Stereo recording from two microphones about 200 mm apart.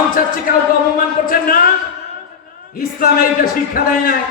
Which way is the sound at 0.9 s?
45° left (ahead or behind).